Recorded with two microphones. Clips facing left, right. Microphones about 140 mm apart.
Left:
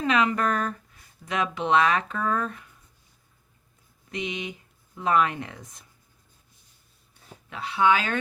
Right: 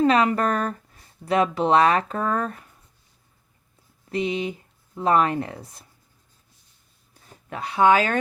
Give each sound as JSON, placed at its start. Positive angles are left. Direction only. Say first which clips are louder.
{"t": 0.0, "sound": "speech", "louder": "right 5 dB", "side_deg": -35}
{"t": 4.1, "sound": "speech", "louder": "right 7 dB", "side_deg": -35}
{"t": 7.1, "sound": "speech", "louder": "right 6 dB", "side_deg": -45}